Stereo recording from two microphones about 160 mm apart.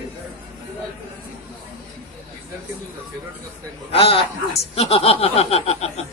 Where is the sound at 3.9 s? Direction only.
35° left (ahead or behind).